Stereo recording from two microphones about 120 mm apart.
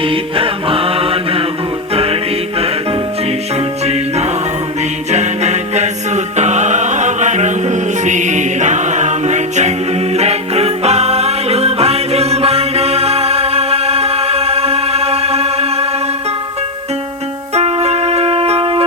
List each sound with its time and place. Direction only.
0.0 s mantra: 50° right (ahead or behind)
1.9 s music: 55° right (ahead or behind)
3.8 s music: 65° right (ahead or behind)
17.5 s music: 60° right (ahead or behind)